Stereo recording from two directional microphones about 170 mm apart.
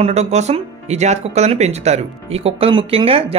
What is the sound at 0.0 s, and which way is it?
Speech, 40° right (ahead or behind).